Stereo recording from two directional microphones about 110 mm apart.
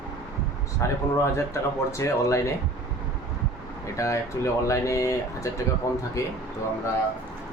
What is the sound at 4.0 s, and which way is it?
Speech, 30° left (ahead or behind).